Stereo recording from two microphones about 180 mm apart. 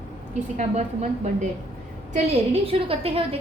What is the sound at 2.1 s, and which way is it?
A woman's voice, 35° right (ahead or behind).